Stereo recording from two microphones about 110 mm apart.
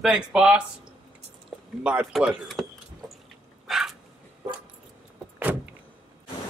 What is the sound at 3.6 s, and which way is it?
Dog, centre (ahead or behind).